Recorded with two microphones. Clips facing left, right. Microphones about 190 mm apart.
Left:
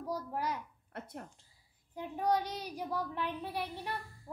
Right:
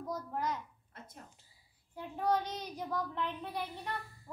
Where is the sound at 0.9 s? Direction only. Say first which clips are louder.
Left 8 dB; 65° left (ahead or behind).